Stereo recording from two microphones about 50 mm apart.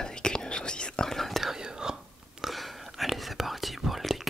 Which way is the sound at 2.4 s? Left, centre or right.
Centre.